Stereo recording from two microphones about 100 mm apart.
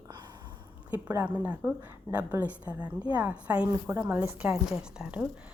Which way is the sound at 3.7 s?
25° right (ahead or behind).